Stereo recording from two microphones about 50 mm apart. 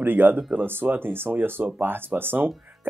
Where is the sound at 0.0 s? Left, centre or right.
Right.